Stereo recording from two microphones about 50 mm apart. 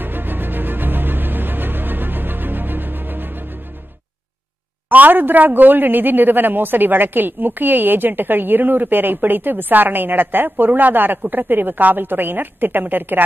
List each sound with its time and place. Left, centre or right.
0.0 s music: right
4.8 s speech: right